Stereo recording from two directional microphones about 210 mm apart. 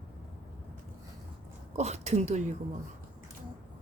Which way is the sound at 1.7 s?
30° right (ahead or behind).